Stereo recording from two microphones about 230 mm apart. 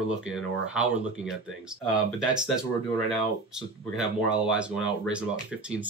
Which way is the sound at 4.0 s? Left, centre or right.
Centre.